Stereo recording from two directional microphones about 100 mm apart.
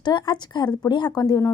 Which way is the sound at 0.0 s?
50° left (ahead or behind).